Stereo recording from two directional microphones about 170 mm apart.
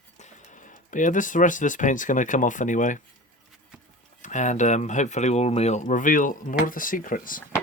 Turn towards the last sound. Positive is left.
turn(degrees=55)  # may be behind; listen again after turning